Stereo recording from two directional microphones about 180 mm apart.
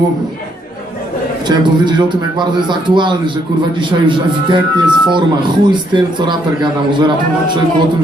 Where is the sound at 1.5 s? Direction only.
25° right (ahead or behind).